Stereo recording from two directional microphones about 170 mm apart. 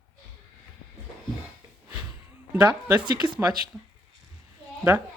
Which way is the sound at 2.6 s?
10° right (ahead or behind).